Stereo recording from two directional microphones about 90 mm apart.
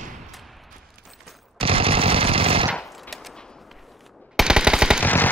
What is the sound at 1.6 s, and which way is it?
Machine gun, 90° right.